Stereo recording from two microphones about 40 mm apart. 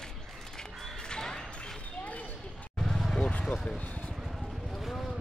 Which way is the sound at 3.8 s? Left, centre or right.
Left.